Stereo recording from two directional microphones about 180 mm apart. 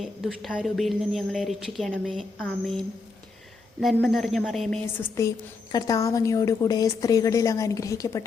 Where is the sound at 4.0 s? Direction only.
Centre (ahead or behind).